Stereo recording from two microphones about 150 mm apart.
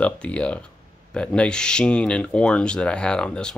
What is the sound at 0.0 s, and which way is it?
Speech, 10° left (ahead or behind).